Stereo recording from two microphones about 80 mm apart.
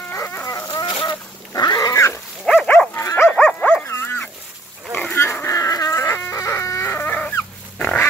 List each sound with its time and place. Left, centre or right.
0.1 s dog: left
0.6 s goose: left
1.6 s cat: left
1.9 s pig: left
2.4 s dog: centre
2.9 s dog: left
3.3 s dog: centre
3.8 s dog: left
5.1 s chicken: left
7.0 s dog: centre